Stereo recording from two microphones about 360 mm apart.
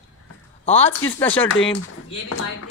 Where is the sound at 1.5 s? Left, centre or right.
Left.